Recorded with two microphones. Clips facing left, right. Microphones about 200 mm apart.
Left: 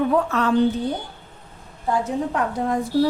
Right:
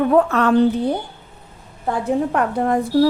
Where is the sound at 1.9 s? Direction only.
60° right (ahead or behind).